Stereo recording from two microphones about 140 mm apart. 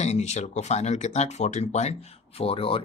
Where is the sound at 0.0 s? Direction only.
50° left (ahead or behind).